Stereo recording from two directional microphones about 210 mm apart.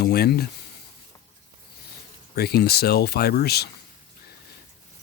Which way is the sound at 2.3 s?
50° left (ahead or behind).